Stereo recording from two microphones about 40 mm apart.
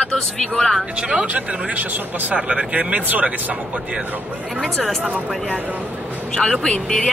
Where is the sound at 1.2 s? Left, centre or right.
Right.